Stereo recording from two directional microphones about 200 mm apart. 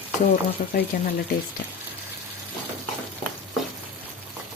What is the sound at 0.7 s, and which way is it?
Speech, 50° left (ahead or behind).